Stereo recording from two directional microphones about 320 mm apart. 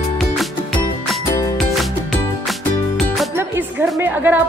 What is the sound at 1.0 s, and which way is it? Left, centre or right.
Music, centre.